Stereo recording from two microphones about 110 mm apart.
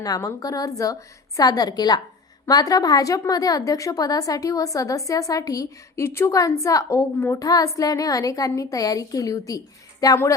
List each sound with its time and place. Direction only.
0.0 s a woman's voice: 30° left (ahead or behind)